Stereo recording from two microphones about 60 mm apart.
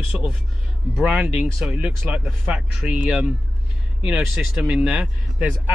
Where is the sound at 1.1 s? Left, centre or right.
Centre.